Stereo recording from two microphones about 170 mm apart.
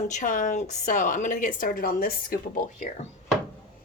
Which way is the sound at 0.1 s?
50° left (ahead or behind).